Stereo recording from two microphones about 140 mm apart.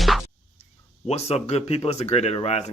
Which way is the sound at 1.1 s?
50° left (ahead or behind).